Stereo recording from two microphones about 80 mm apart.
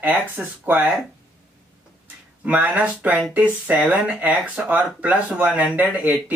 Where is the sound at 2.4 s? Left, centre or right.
Centre.